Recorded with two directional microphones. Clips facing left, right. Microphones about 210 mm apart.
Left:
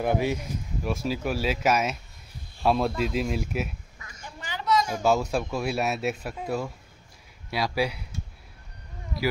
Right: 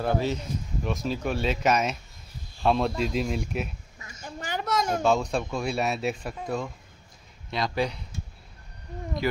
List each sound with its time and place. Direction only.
0.0 s speech: 15° left (ahead or behind)
4.2 s a sound: 45° right (ahead or behind)
5.0 s speech: 5° left (ahead or behind)